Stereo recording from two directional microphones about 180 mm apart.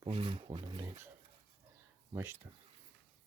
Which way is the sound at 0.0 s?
30° right (ahead or behind).